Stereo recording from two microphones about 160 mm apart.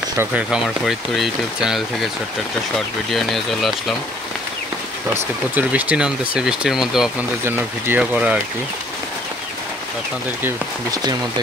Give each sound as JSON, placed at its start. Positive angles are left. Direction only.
{"t": 0.2, "sound": "speech", "side_deg": -5}
{"t": 3.1, "sound": "speech", "side_deg": 0}
{"t": 5.5, "sound": "speech", "side_deg": -10}
{"t": 7.4, "sound": "speech", "side_deg": -15}
{"t": 10.4, "sound": "speech", "side_deg": -25}